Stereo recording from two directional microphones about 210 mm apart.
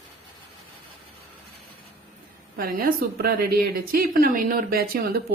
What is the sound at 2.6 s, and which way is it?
A woman's voice, 45° right (ahead or behind).